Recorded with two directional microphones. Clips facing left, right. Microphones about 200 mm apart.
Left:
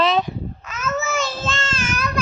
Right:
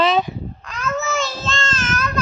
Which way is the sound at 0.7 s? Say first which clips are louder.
Right 1 dB; centre (ahead or behind).